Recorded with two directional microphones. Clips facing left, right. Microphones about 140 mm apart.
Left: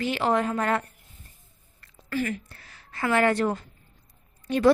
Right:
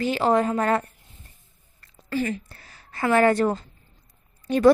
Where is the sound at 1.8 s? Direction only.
25° right (ahead or behind).